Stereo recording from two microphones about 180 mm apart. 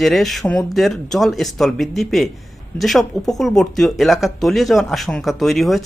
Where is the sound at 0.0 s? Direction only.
Centre (ahead or behind).